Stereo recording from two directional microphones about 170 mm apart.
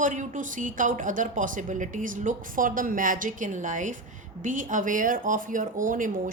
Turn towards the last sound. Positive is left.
turn(degrees=-50)  # may be behind; listen again after turning